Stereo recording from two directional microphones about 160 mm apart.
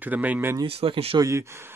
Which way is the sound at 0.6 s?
35° right (ahead or behind).